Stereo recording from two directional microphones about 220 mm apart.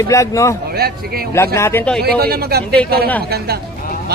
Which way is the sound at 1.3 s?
10° left (ahead or behind).